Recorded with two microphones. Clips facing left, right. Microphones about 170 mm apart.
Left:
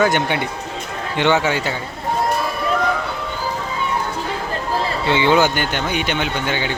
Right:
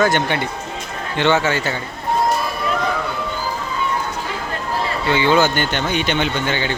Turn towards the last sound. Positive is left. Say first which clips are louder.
# right 1 dB
turn(degrees=10)  # may be behind; listen again after turning